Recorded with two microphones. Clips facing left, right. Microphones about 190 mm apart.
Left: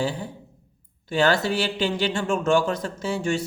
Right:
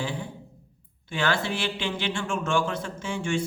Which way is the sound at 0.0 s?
40° left (ahead or behind).